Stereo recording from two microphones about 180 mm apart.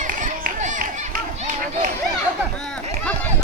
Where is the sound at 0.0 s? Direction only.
45° right (ahead or behind).